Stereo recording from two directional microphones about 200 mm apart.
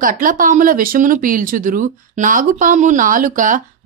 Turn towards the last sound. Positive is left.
turn(degrees=-40)  # may be behind; listen again after turning